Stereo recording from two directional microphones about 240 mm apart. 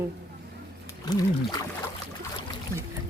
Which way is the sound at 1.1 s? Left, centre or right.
Centre.